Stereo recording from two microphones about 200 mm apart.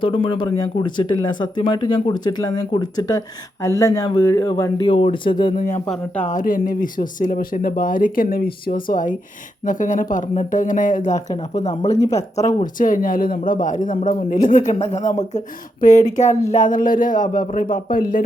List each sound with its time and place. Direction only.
0.0 s speech: 25° left (ahead or behind)
5.5 s speech: 40° left (ahead or behind)
5.8 s speech: 5° left (ahead or behind)
6.2 s speech: 40° left (ahead or behind)